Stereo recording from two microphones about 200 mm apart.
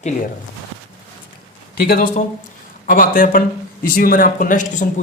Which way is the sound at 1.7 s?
50° left (ahead or behind).